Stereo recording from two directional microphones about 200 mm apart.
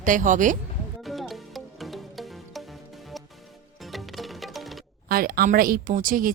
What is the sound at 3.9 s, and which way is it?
Music, centre (ahead or behind).